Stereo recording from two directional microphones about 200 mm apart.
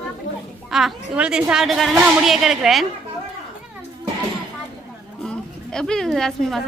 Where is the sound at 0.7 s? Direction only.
Centre (ahead or behind).